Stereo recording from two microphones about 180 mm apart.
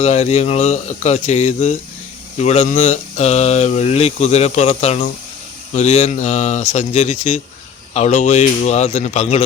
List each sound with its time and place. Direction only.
0.0 s speech: 35° left (ahead or behind)